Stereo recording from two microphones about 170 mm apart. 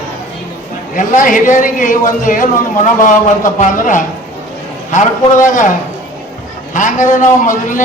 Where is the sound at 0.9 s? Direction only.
50° left (ahead or behind).